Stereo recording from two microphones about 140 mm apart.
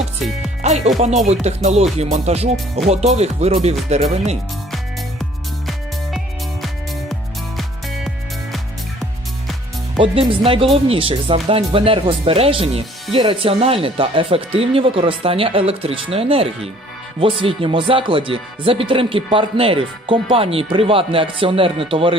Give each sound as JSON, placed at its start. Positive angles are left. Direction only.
{"t": 0.9, "sound": "speech", "side_deg": -50}
{"t": 5.6, "sound": "music", "side_deg": 0}
{"t": 10.0, "sound": "speech", "side_deg": -40}